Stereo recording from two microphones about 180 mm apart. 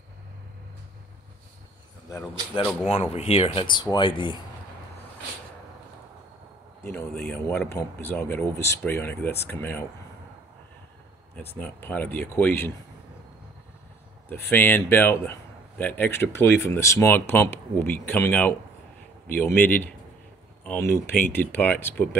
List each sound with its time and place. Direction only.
2.9 s speech: 35° left (ahead or behind)
6.8 s speech: 15° left (ahead or behind)
11.3 s speech: 10° left (ahead or behind)
14.3 s speech: 10° left (ahead or behind)